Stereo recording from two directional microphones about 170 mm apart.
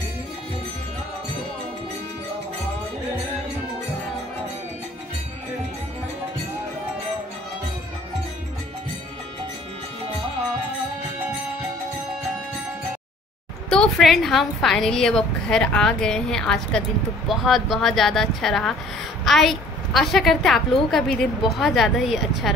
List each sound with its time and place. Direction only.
13.7 s a woman's voice: centre (ahead or behind)